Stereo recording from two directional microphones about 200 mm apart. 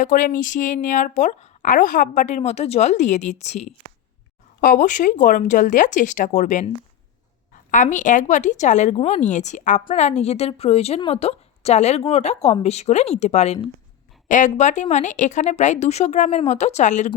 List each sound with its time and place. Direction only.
0.0 s a woman's voice: 40° left (ahead or behind)
7.7 s a woman's voice: 40° left (ahead or behind)